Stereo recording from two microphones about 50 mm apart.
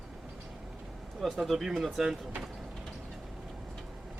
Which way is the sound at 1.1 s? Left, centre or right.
Centre.